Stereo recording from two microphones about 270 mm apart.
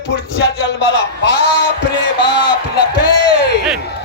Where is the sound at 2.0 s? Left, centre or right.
Left.